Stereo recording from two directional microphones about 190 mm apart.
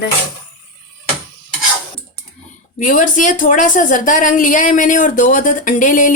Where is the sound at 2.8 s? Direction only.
45° left (ahead or behind).